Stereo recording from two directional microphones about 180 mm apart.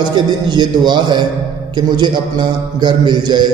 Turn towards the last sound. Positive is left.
turn(degrees=-25)  # may be behind; listen again after turning